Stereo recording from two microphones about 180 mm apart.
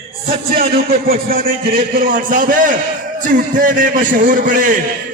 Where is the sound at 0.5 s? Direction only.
55° right (ahead or behind).